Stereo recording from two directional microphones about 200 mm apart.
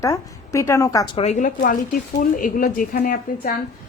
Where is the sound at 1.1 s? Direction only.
30° left (ahead or behind).